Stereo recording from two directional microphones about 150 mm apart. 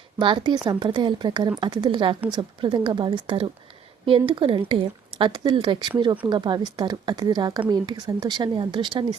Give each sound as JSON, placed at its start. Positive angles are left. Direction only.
{"t": 0.2, "sound": "speech", "side_deg": -30}